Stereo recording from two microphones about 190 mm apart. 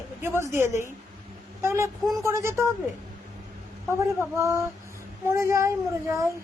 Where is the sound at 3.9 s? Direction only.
15° right (ahead or behind).